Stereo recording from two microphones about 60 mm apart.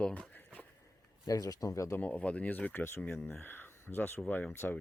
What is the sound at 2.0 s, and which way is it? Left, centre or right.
Speech, left.